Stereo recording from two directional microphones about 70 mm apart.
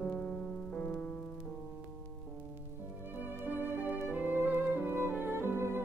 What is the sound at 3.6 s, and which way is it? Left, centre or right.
Music, right.